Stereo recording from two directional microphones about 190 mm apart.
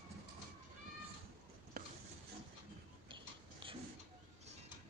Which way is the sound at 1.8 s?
55° right (ahead or behind).